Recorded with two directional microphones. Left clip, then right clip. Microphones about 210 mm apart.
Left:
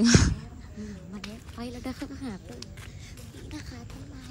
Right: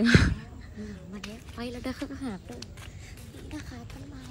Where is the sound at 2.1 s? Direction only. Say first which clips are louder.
Right 2 dB; 15° right (ahead or behind).